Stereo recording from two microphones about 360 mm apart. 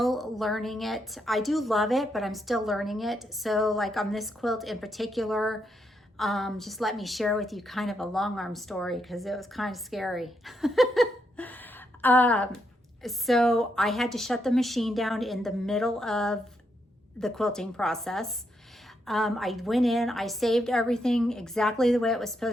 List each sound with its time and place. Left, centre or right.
0.0 s a woman's voice: centre